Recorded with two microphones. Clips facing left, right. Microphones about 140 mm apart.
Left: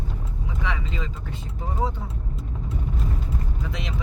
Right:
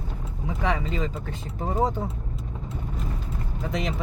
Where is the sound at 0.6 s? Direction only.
45° right (ahead or behind).